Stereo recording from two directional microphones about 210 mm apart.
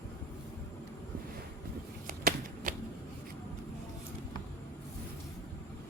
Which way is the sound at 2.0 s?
40° right (ahead or behind).